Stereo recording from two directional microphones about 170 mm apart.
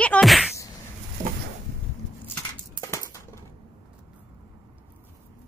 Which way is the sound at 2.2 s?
15° left (ahead or behind).